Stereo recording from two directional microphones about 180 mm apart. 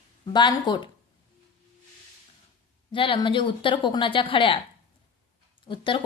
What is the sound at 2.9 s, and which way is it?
Speech, 30° left (ahead or behind).